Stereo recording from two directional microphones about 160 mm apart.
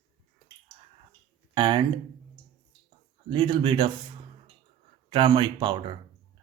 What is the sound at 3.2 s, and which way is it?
Speech, 30° right (ahead or behind).